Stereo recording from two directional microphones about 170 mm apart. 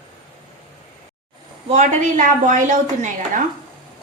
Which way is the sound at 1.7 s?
45° right (ahead or behind).